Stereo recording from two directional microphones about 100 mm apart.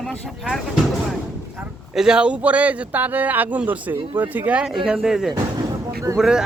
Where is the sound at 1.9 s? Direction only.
10° right (ahead or behind).